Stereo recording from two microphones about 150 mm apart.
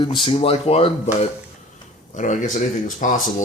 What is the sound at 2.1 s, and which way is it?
Speech, 55° left (ahead or behind).